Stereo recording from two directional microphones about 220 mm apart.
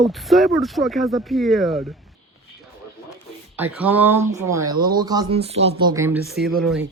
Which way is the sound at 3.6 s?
5° right (ahead or behind).